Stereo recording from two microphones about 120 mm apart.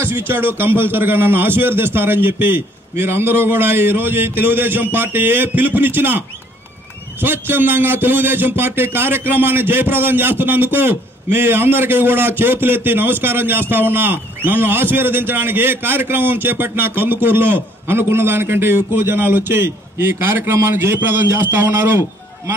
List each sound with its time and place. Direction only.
0.0 s a man's voice: 20° right (ahead or behind)